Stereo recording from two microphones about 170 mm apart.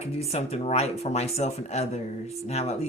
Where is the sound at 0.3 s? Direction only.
40° left (ahead or behind).